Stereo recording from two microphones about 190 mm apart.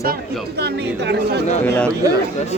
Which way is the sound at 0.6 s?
60° right (ahead or behind).